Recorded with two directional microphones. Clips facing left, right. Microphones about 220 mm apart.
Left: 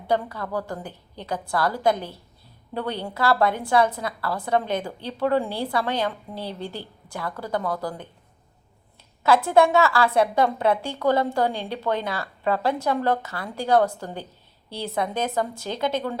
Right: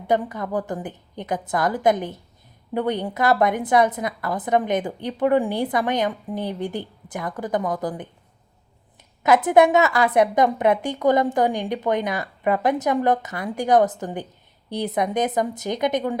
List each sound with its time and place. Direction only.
0.1 s a woman's voice: 20° right (ahead or behind)
9.2 s a woman's voice: 20° right (ahead or behind)